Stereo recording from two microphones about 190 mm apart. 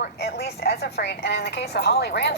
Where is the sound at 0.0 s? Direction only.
55° left (ahead or behind).